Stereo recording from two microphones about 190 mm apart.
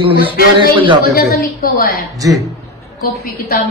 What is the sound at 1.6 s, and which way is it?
Speech, 50° left (ahead or behind).